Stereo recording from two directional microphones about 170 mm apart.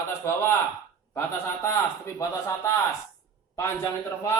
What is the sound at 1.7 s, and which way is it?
A man's voice, 15° left (ahead or behind).